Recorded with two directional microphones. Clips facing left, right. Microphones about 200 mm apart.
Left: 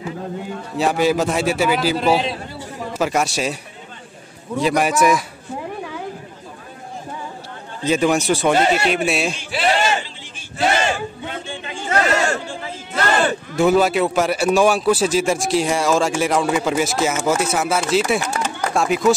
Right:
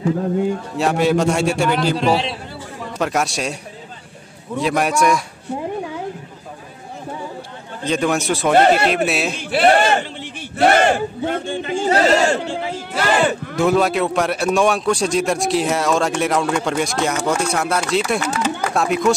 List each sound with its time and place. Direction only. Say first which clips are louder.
0.7 s a man's voice: even; centre (ahead or behind)
4.6 s speech: left 1 dB; centre (ahead or behind)
7.8 s speech: left 2 dB; 5° left (ahead or behind)
8.5 s a man's voice: right 4 dB; 55° right (ahead or behind)
8.8 s speech: right 1 dB; centre (ahead or behind)
9.3 s a man's voice: right 6 dB; 55° right (ahead or behind); by 12.4 s 30° right (ahead or behind)
12.9 s battle cry: right 1 dB; 5° right (ahead or behind)
13.6 s speech: left 1 dB; centre (ahead or behind)